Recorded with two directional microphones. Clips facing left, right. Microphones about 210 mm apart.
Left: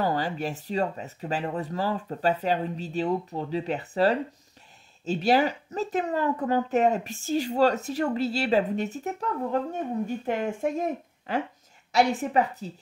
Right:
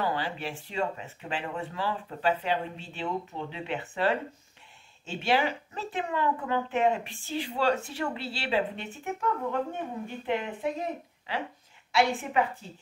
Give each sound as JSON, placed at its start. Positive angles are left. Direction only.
{"t": 0.0, "sound": "speech", "side_deg": 40}